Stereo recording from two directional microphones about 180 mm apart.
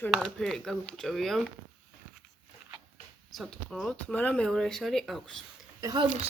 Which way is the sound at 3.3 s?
Centre (ahead or behind).